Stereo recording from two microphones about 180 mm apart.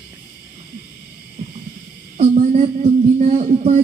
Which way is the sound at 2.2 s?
40° right (ahead or behind).